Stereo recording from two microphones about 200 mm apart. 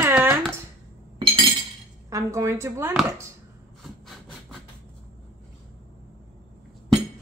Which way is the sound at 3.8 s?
Centre (ahead or behind).